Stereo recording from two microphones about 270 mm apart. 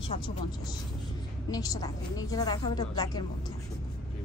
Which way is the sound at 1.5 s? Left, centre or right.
Centre.